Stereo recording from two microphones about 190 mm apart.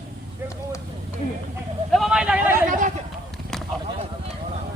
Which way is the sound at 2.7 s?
40° right (ahead or behind).